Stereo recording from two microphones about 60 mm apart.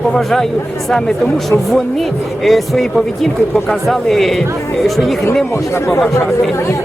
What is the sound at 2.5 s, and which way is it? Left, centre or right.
Speech, centre.